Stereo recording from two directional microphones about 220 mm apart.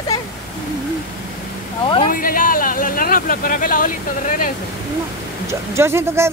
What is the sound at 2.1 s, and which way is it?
Speech, 40° left (ahead or behind).